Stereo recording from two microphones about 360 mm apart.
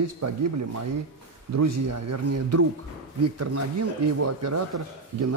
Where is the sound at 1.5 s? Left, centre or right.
Right.